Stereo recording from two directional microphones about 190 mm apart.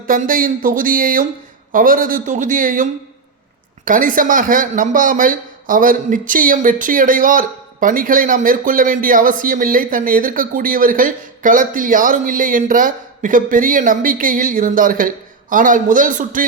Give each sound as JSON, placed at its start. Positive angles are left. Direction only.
{"t": 0.1, "sound": "speech", "side_deg": -45}